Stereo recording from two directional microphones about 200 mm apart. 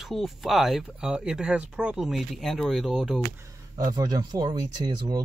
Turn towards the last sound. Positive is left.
turn(degrees=-20)  # may be behind; listen again after turning